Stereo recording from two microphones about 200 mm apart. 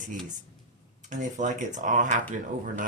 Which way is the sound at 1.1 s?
40° right (ahead or behind).